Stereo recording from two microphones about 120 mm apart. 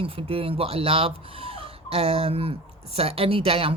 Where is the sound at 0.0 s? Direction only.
50° right (ahead or behind).